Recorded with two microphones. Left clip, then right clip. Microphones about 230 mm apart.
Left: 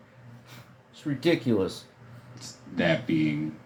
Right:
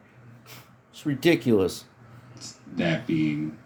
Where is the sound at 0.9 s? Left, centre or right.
Right.